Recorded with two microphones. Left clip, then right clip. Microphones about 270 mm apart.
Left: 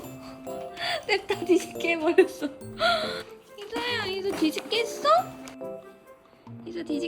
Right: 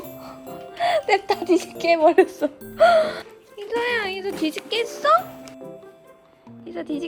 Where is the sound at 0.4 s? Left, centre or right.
Centre.